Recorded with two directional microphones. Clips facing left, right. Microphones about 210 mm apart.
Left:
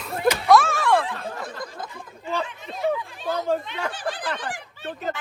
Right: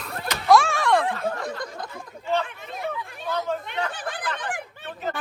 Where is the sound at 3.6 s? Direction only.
55° right (ahead or behind).